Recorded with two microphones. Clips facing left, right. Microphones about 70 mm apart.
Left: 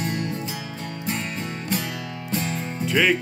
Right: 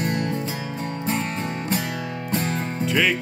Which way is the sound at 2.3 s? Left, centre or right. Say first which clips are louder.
Right 2 dB; right.